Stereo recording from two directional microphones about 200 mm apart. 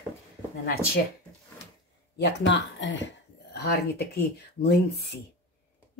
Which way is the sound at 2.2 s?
65° left (ahead or behind).